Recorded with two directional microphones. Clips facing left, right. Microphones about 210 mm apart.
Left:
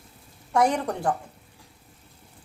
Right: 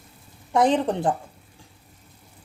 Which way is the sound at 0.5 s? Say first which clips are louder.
Right 3 dB; 25° right (ahead or behind).